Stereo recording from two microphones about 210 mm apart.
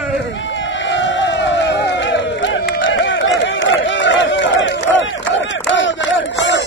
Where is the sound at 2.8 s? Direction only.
60° left (ahead or behind).